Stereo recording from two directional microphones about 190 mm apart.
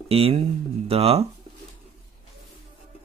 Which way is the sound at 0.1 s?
30° right (ahead or behind).